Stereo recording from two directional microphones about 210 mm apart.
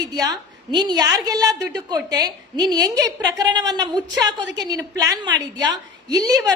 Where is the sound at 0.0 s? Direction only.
15° right (ahead or behind).